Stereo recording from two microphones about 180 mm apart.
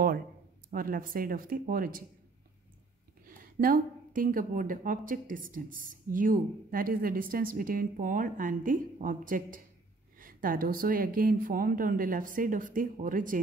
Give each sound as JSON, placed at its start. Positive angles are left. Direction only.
{"t": 0.7, "sound": "speech", "side_deg": -50}
{"t": 3.3, "sound": "speech", "side_deg": -50}